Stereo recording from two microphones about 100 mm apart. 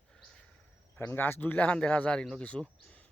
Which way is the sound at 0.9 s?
20° left (ahead or behind).